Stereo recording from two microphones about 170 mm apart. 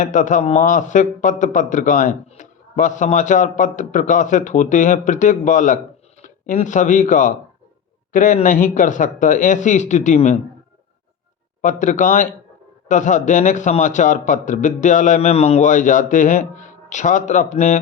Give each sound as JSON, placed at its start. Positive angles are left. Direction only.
{"t": 0.0, "sound": "a man's voice", "side_deg": 50}
{"t": 11.6, "sound": "a man's voice", "side_deg": 50}